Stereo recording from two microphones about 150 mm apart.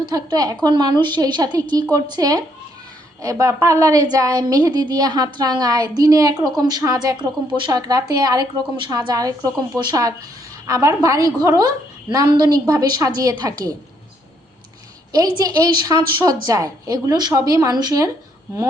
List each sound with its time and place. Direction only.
0.0 s a woman's voice: 25° right (ahead or behind)
15.1 s a woman's voice: 25° right (ahead or behind)